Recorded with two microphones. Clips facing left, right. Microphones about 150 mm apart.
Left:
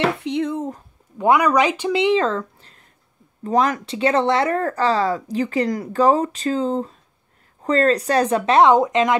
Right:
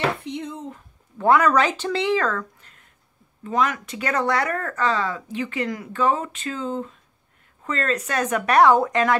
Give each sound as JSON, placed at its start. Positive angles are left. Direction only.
{"t": 0.2, "sound": "speech", "side_deg": 75}
{"t": 0.6, "sound": "speech", "side_deg": 40}
{"t": 1.1, "sound": "speech", "side_deg": 15}